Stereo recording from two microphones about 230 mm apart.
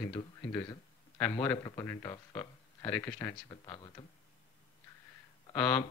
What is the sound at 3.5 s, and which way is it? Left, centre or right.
Speech, centre.